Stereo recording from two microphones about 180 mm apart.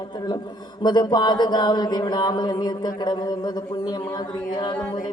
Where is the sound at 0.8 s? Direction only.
25° left (ahead or behind).